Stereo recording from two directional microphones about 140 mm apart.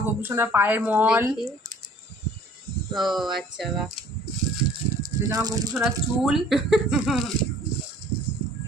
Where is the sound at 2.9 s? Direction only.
Centre (ahead or behind).